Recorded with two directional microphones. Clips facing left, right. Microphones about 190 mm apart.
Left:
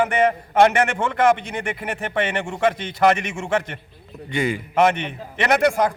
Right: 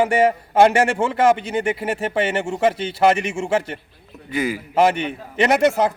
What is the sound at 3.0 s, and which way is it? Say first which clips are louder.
Speech: right 1 dB; 25° right (ahead or behind).